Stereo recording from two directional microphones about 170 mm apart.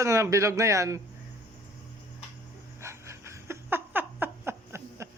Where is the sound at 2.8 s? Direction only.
15° right (ahead or behind).